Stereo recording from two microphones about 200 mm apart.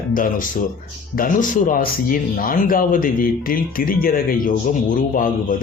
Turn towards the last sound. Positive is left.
turn(degrees=40)  # may be behind; listen again after turning